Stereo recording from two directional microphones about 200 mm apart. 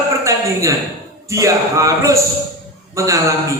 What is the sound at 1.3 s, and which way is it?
A man's voice, 15° right (ahead or behind).